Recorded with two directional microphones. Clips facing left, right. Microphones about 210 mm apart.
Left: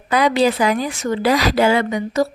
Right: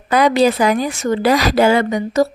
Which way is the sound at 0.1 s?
45° right (ahead or behind).